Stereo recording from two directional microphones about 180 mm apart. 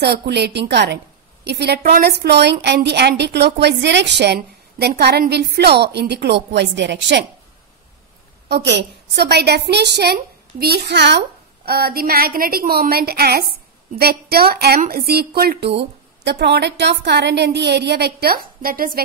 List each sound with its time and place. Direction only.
0.0 s a woman's voice: 65° right (ahead or behind)
8.5 s a woman's voice: 70° right (ahead or behind); by 18.9 s 55° right (ahead or behind)